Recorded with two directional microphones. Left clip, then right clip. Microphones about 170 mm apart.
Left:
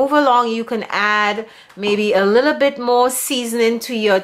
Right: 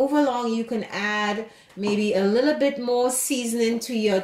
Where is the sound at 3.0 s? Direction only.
15° left (ahead or behind).